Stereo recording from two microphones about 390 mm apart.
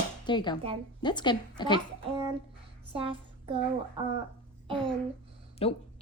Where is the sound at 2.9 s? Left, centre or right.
Centre.